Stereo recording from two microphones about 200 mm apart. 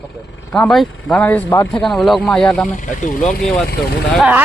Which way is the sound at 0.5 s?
Centre (ahead or behind).